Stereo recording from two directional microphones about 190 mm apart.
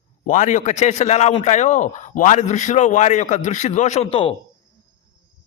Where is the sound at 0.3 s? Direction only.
40° left (ahead or behind).